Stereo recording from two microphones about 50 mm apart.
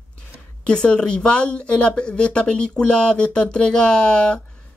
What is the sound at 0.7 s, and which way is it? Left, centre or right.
Speech, centre.